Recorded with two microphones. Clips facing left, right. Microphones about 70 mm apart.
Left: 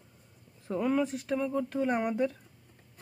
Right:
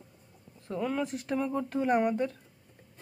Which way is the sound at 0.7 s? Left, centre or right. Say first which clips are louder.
Left 3 dB; centre.